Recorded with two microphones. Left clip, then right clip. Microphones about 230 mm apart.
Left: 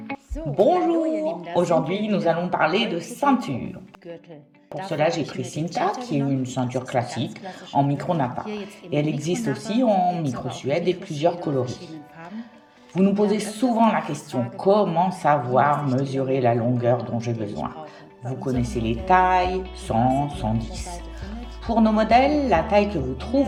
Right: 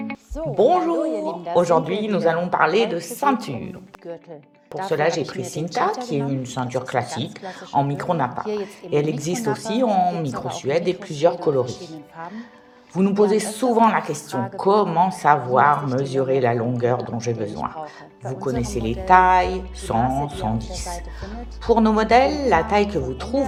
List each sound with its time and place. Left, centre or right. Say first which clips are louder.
0.5 s speech: right 1 dB; centre
4.7 s speech: right 2 dB; centre
13.1 s speech: right 5 dB; centre